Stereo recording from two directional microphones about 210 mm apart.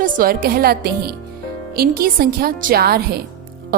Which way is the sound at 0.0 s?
40° right (ahead or behind).